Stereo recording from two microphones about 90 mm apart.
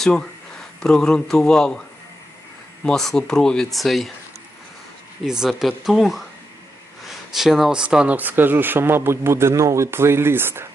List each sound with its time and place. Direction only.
0.0 s speech: 10° left (ahead or behind)
2.8 s speech: 5° left (ahead or behind)
5.2 s speech: 5° right (ahead or behind); by 10.7 s 25° right (ahead or behind)